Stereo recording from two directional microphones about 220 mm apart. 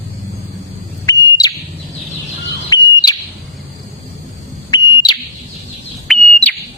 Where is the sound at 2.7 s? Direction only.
15° left (ahead or behind).